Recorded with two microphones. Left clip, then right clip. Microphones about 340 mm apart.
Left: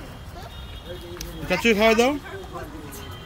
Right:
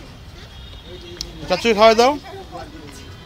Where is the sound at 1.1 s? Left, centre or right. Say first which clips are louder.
Right 4 dB; centre.